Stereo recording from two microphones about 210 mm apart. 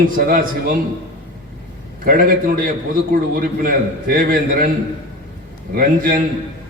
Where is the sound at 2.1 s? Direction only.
40° right (ahead or behind).